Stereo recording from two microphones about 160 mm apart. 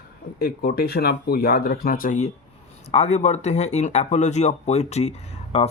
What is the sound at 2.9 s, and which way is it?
Speech, 40° left (ahead or behind).